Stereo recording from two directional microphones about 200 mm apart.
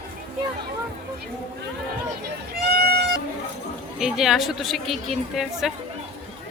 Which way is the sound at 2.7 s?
50° right (ahead or behind).